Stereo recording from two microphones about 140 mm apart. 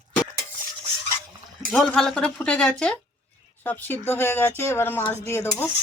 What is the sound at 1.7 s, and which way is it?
Speech, 5° left (ahead or behind).